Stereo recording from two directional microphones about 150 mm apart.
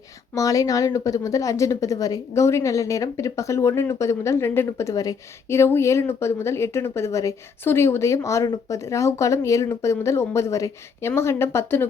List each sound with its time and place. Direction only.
0.3 s a woman's voice: 25° left (ahead or behind)